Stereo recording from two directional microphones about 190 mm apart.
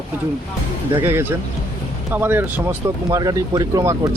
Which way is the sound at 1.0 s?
10° right (ahead or behind).